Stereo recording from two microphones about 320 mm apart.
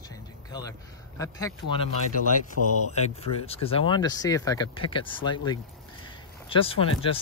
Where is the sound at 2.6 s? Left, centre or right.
Right.